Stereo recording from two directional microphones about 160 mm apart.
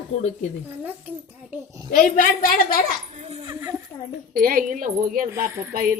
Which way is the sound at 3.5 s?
15° right (ahead or behind).